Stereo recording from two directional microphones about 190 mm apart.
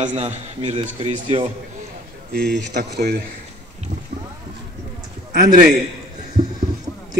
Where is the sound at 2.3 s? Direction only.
55° right (ahead or behind).